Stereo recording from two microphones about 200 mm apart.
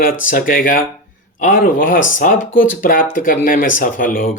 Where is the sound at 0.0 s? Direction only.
45° left (ahead or behind).